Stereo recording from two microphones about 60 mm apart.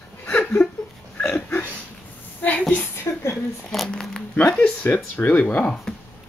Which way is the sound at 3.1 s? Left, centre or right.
Left.